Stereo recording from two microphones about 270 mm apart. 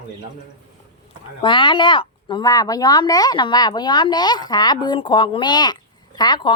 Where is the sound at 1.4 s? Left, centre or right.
Centre.